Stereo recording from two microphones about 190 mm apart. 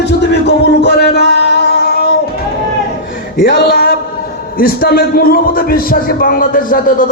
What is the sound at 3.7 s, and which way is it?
A man's voice, 55° left (ahead or behind).